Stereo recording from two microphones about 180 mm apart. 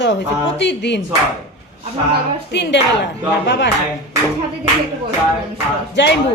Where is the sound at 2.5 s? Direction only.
75° left (ahead or behind).